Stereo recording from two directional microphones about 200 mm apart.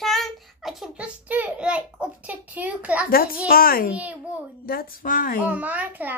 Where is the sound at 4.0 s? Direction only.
10° right (ahead or behind).